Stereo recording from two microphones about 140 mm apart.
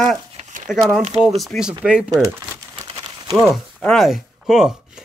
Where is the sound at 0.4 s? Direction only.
65° right (ahead or behind).